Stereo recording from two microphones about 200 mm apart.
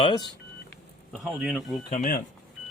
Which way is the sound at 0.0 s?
20° left (ahead or behind).